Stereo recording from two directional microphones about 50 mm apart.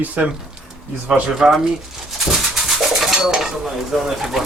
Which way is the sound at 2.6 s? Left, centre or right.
Centre.